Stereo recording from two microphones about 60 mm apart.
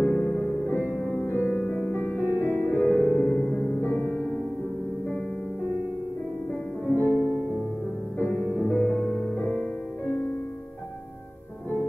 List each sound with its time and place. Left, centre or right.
0.0 s music: left
3.5 s music: left
3.8 s music: left
7.0 s music: right
8.4 s music: right
8.6 s music: left
9.1 s music: left